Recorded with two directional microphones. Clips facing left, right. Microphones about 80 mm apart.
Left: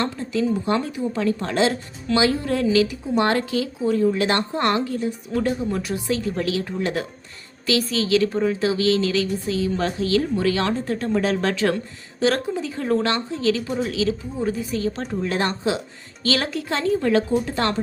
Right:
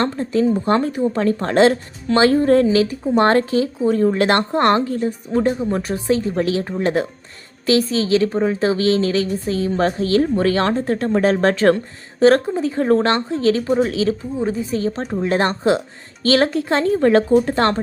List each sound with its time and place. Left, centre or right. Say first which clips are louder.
0.0 s a woman's voice: right 5 dB; right